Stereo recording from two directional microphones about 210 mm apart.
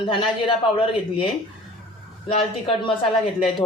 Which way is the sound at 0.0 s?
25° left (ahead or behind).